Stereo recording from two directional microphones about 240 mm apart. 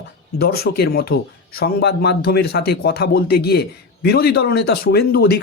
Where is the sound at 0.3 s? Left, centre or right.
Left.